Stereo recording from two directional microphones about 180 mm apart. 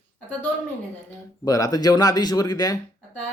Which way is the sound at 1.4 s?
20° left (ahead or behind).